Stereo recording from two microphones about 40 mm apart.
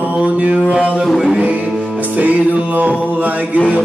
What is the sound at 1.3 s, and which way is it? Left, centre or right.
Music, right.